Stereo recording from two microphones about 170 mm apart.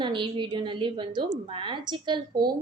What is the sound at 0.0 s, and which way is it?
A woman's voice, 30° right (ahead or behind).